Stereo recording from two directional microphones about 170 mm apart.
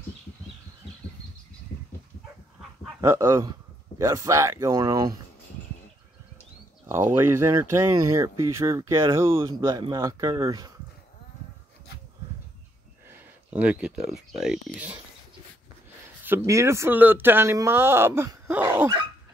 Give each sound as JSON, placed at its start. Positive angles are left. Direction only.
{"t": 3.0, "sound": "speech", "side_deg": -15}
{"t": 6.9, "sound": "speech", "side_deg": -15}
{"t": 13.1, "sound": "speech", "side_deg": -10}
{"t": 16.3, "sound": "speech", "side_deg": -15}